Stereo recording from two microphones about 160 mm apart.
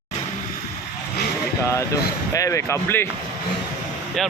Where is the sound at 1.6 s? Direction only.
20° left (ahead or behind).